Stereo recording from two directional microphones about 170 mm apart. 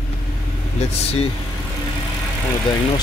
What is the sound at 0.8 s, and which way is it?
Speech, 35° left (ahead or behind).